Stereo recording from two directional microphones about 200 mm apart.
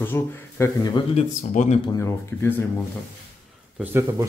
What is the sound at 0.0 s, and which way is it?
Speech, 15° left (ahead or behind).